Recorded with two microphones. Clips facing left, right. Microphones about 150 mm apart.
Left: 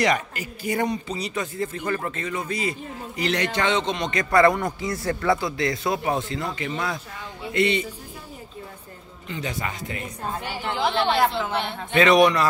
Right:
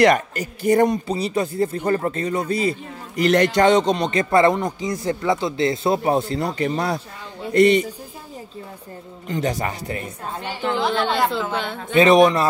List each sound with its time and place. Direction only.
0.0 s a man's voice: 45° right (ahead or behind)
3.2 s a man's voice: 45° right (ahead or behind)
9.3 s a man's voice: 40° right (ahead or behind)
10.8 s speech: centre (ahead or behind)
11.9 s a man's voice: 25° right (ahead or behind)